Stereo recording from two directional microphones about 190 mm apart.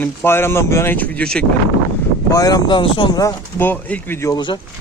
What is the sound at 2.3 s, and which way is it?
Speech, 20° left (ahead or behind).